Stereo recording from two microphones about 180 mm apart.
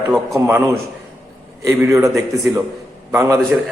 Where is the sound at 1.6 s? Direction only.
15° right (ahead or behind).